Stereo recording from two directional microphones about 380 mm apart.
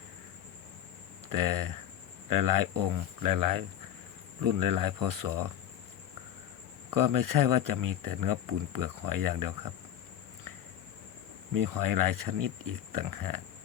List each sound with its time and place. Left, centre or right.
1.3 s speech: right
6.9 s speech: right
11.5 s speech: right